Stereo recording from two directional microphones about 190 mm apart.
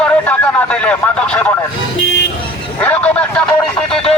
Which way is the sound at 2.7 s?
10° left (ahead or behind).